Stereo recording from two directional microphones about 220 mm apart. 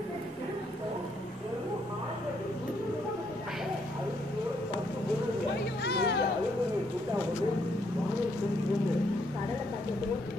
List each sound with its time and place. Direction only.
5.9 s music: 45° left (ahead or behind)